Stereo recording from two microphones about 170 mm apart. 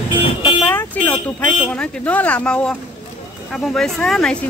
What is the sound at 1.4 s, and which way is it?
Speech, 10° left (ahead or behind).